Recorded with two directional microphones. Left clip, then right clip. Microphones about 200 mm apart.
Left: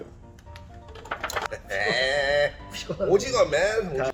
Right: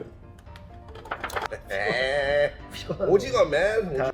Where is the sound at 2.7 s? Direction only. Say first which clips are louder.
Even; 15° right (ahead or behind).